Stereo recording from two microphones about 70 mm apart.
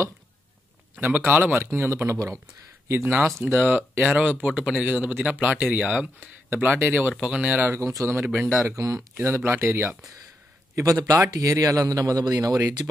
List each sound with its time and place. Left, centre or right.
0.9 s speech: right
6.5 s speech: right
7.2 s speech: centre
7.6 s speech: right
8.5 s speech: right
9.1 s speech: right
10.8 s a man's voice: right